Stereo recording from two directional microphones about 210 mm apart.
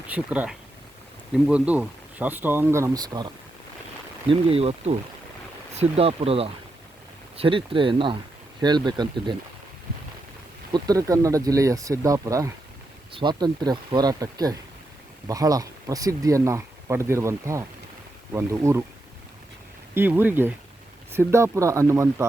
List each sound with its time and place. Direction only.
0.1 s speech: 5° right (ahead or behind)
10.7 s speech: 20° right (ahead or behind)
19.9 s speech: 10° right (ahead or behind)